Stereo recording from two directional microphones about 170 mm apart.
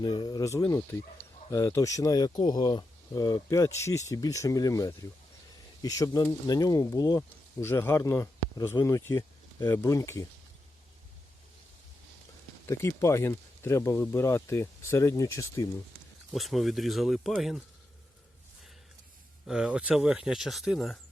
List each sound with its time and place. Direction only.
0.0 s speech: 25° left (ahead or behind)
12.6 s speech: 15° left (ahead or behind)
16.3 s speech: centre (ahead or behind)
19.5 s speech: 5° right (ahead or behind)